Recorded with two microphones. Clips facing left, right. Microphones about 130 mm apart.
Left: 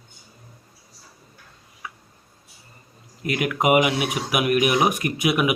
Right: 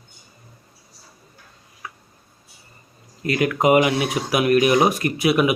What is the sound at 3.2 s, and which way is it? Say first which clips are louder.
Speech: right 3 dB; 10° left (ahead or behind).